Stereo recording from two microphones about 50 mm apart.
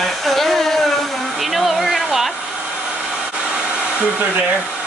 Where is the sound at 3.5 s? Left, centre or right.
Right.